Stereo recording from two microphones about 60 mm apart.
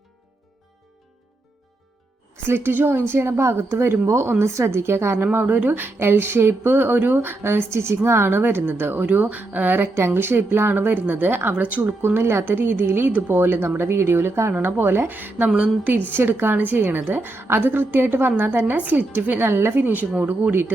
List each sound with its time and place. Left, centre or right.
2.5 s a woman's voice: right
5.2 s speech: right
11.8 s a woman's voice: right
16.1 s speech: right